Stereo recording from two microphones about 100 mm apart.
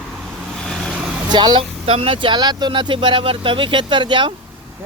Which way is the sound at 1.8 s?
80° right.